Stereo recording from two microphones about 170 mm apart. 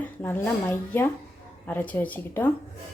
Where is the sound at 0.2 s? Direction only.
10° left (ahead or behind).